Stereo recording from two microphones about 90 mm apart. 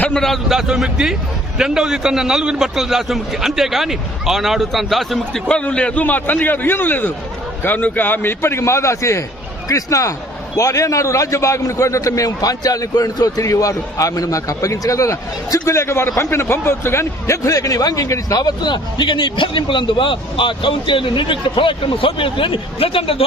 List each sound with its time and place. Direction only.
0.0 s a man's voice: 5° left (ahead or behind); by 23.2 s 80° left